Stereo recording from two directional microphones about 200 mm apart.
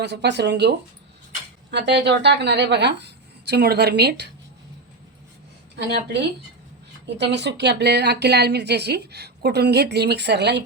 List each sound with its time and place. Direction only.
0.0 s speech: 60° right (ahead or behind)
5.7 s speech: 55° right (ahead or behind)